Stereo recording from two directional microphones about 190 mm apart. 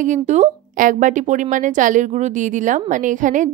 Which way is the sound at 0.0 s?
40° right (ahead or behind).